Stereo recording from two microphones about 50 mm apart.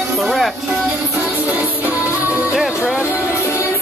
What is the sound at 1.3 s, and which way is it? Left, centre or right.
Music, right.